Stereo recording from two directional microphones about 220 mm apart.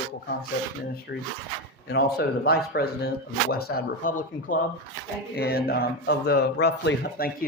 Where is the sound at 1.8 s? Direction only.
50° left (ahead or behind).